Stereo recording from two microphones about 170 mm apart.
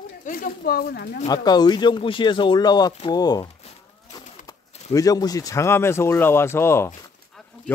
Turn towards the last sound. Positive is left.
turn(degrees=15)  # may be behind; listen again after turning